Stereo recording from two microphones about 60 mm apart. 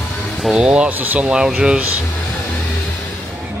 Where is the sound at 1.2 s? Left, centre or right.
Centre.